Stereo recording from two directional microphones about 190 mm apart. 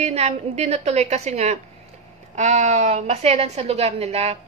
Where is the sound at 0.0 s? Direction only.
35° right (ahead or behind).